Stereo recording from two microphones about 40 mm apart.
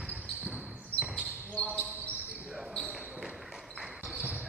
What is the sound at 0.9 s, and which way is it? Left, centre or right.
Basketball bounce, left.